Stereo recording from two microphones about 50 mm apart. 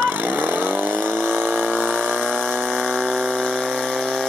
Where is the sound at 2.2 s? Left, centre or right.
Centre.